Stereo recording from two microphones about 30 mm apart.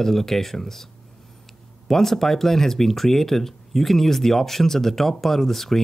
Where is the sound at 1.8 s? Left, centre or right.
Centre.